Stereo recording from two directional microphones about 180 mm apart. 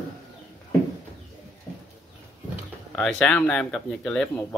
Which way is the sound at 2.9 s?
5° left (ahead or behind).